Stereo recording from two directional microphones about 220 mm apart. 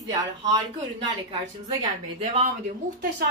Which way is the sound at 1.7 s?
25° right (ahead or behind).